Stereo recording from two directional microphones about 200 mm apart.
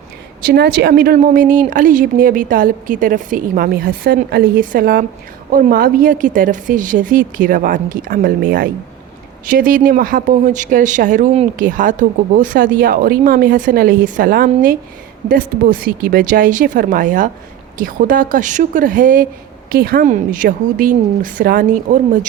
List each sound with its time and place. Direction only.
0.4 s a woman's voice: 55° right (ahead or behind)